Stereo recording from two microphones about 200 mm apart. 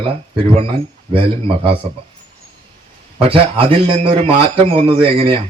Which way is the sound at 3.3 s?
25° right (ahead or behind).